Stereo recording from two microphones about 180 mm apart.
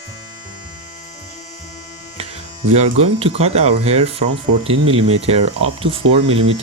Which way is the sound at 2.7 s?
40° right (ahead or behind).